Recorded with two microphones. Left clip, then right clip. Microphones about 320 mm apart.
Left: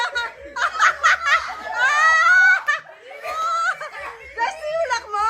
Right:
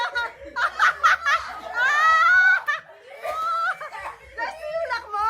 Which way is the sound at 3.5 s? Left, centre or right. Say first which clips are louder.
Left 4 dB; centre.